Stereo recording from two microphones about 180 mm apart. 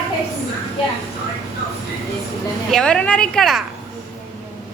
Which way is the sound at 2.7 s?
5° left (ahead or behind).